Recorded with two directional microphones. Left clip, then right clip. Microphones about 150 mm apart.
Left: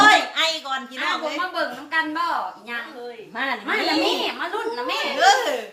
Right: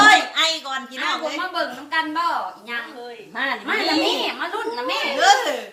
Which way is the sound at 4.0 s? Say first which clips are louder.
Right 1 dB; 15° right (ahead or behind).